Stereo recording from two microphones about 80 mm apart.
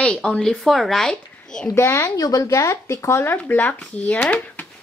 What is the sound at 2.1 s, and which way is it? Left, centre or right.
Speech, left.